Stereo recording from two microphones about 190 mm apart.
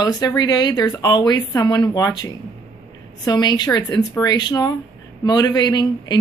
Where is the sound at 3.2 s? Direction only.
20° left (ahead or behind).